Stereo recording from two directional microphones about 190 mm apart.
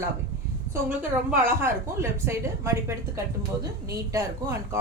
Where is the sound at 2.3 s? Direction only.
15° right (ahead or behind).